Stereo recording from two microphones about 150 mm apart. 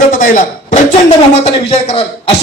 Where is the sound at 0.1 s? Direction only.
55° left (ahead or behind).